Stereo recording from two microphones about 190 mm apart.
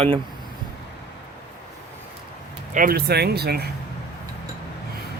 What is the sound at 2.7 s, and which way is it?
Speech, 50° right (ahead or behind).